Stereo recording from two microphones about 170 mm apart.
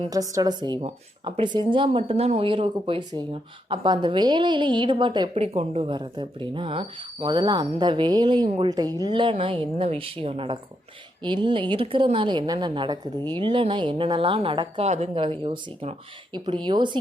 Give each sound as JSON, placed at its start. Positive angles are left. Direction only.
{"t": 0.1, "sound": "a woman's voice", "side_deg": -20}
{"t": 5.3, "sound": "a woman's voice", "side_deg": -35}